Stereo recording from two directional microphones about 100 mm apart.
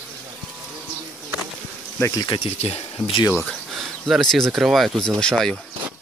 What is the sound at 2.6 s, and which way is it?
Speech, 90° left.